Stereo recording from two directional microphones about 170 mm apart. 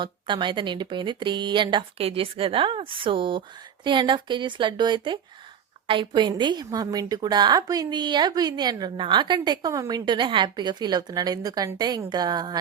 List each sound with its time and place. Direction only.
0.0 s a woman's voice: 30° right (ahead or behind)